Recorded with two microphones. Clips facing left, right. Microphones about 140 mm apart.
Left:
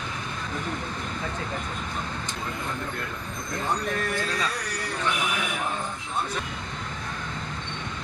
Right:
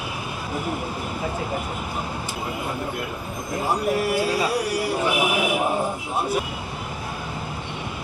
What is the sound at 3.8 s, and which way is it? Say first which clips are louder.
Speech: right 7 dB; 10° right (ahead or behind).